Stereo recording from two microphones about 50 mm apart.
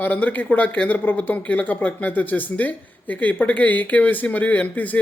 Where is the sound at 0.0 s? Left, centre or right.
Left.